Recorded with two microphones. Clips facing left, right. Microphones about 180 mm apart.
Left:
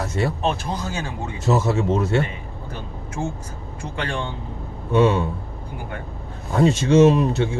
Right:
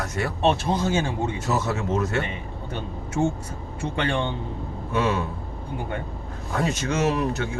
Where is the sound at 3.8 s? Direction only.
25° right (ahead or behind).